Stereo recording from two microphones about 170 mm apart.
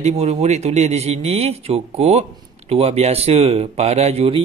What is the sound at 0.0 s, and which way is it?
Speech, 40° right (ahead or behind).